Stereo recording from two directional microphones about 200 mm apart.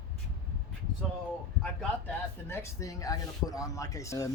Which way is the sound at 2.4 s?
10° left (ahead or behind).